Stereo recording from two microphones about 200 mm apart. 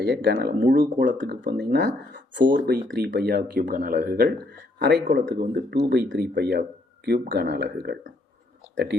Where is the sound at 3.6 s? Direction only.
45° right (ahead or behind).